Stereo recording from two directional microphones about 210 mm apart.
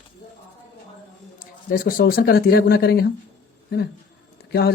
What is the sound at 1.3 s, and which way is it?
Speech, 40° left (ahead or behind).